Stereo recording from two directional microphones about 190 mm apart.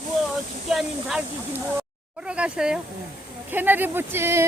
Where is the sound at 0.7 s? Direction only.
Centre (ahead or behind).